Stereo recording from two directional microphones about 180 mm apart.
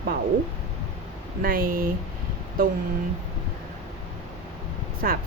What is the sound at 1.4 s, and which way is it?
Speech, 55° right (ahead or behind).